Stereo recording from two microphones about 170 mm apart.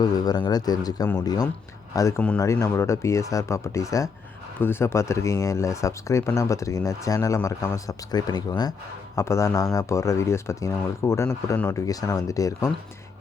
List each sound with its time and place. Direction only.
0.0 s speech: 25° left (ahead or behind)